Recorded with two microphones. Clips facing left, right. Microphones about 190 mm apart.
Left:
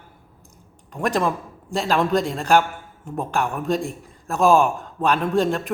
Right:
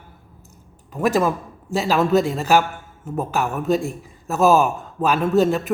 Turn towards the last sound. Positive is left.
turn(degrees=-5)  # may be behind; listen again after turning